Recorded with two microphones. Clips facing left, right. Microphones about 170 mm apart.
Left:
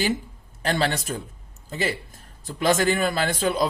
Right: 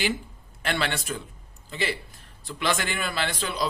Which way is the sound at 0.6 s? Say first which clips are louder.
Left 4 dB; 40° left (ahead or behind).